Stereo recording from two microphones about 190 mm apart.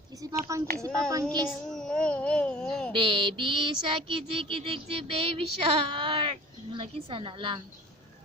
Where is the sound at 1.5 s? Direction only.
5° left (ahead or behind).